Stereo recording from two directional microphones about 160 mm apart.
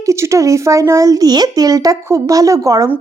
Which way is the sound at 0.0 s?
20° right (ahead or behind).